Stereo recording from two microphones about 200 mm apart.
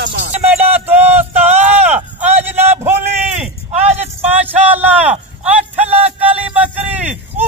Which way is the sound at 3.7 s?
30° right (ahead or behind).